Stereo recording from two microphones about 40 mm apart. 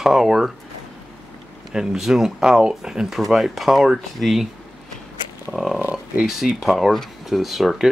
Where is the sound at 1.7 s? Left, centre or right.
Centre.